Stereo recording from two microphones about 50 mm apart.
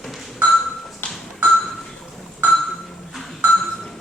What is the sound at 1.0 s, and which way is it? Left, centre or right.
Ping, left.